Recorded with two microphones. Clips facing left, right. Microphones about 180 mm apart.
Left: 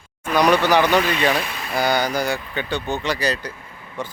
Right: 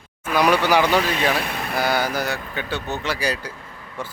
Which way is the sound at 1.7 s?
5° right (ahead or behind).